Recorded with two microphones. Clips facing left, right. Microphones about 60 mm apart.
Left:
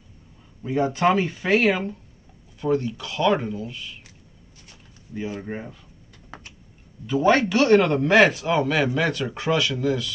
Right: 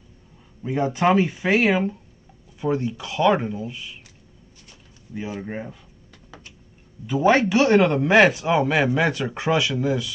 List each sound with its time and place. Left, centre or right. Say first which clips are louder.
0.6 s speech: even; centre
5.1 s speech: even; centre
7.1 s speech: right 1 dB; centre